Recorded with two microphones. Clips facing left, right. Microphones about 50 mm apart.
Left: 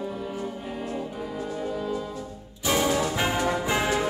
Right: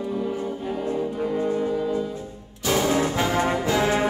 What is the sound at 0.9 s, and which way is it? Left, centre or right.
Music, right.